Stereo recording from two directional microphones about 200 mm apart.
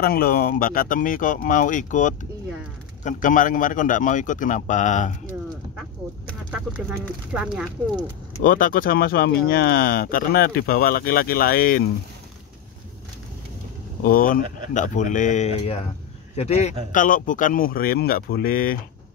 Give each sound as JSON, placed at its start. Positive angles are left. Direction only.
{"t": 0.0, "sound": "a man's voice", "side_deg": 50}
{"t": 6.5, "sound": "speech", "side_deg": -5}
{"t": 8.4, "sound": "speech", "side_deg": 45}
{"t": 14.0, "sound": "a man's voice", "side_deg": 45}